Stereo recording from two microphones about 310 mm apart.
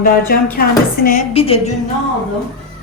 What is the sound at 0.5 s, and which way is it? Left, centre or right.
A woman's voice, left.